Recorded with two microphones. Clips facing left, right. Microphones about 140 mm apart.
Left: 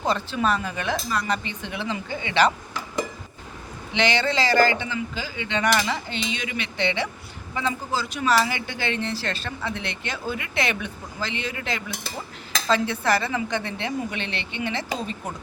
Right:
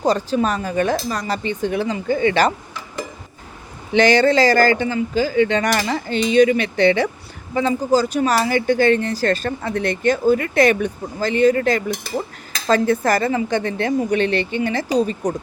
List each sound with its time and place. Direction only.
0.0 s speech: 40° right (ahead or behind)
3.9 s speech: 45° right (ahead or behind)